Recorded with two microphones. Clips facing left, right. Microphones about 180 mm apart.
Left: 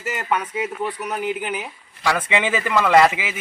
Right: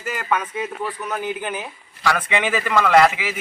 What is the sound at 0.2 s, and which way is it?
A man's voice, 15° left (ahead or behind).